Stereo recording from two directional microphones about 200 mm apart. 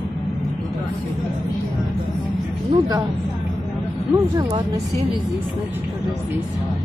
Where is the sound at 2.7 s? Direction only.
20° right (ahead or behind).